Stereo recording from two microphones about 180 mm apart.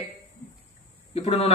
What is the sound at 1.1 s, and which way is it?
Speech, 35° left (ahead or behind).